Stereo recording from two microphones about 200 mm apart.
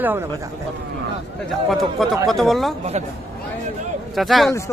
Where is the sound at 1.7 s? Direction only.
Centre (ahead or behind).